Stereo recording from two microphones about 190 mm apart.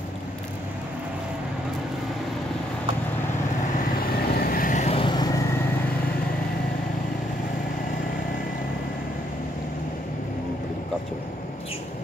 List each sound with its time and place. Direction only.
4.4 s vehicle: 50° left (ahead or behind); by 5.3 s 25° left (ahead or behind)